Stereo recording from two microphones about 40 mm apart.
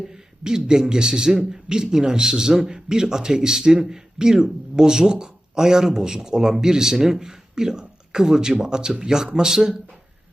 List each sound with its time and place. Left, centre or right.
0.4 s speech: centre